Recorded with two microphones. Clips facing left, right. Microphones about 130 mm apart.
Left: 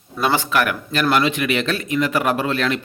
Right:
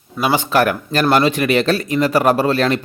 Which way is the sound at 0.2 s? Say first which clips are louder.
Right 2 dB; 10° right (ahead or behind).